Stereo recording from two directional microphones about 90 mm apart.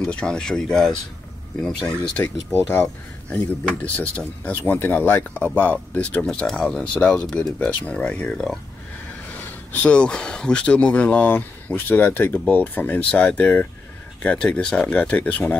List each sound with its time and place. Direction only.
0.0 s speech: 10° left (ahead or behind)
2.7 s speech: 20° left (ahead or behind)